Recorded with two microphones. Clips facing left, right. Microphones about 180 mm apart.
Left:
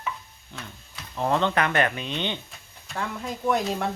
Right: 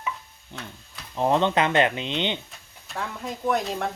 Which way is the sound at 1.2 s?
20° right (ahead or behind).